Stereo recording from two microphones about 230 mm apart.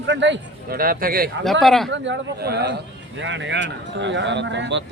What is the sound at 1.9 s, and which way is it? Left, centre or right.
A man's voice, right.